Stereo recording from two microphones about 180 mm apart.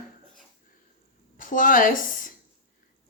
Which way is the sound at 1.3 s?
50° left (ahead or behind).